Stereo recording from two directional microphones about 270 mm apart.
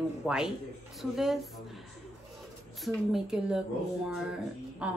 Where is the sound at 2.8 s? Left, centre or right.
Centre.